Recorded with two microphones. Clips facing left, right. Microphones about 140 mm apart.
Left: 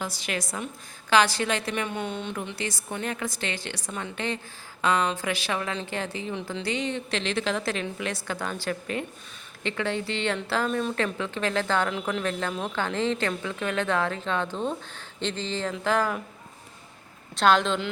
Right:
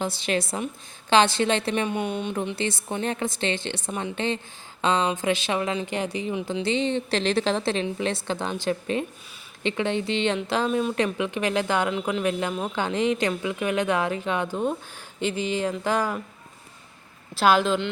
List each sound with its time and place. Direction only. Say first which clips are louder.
0.0 s a woman's voice: right 6 dB; 25° right (ahead or behind)
17.3 s speech: right 2 dB; 5° right (ahead or behind)